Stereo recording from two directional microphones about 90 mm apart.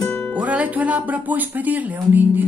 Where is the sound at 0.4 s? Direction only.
15° right (ahead or behind).